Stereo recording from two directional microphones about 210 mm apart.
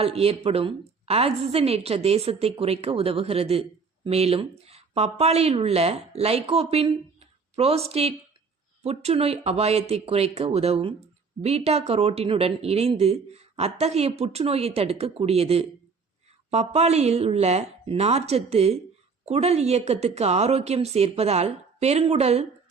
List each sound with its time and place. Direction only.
0.0 s a woman's voice: 30° right (ahead or behind)